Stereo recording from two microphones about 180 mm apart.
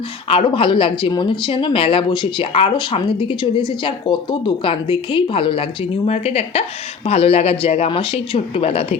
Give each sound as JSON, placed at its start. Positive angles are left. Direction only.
{"t": 0.3, "sound": "speech", "side_deg": 30}